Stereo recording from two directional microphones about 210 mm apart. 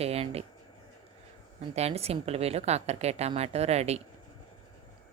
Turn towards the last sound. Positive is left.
turn(degrees=-30)  # may be behind; listen again after turning